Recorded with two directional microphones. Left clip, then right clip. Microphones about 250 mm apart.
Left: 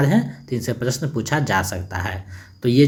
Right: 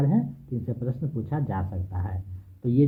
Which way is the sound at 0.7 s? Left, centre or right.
Left.